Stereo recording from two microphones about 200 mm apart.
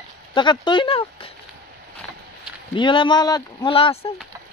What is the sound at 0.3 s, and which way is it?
Speech, 20° left (ahead or behind).